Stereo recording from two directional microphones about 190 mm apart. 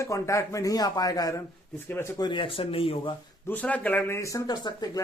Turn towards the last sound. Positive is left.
turn(degrees=20)  # may be behind; listen again after turning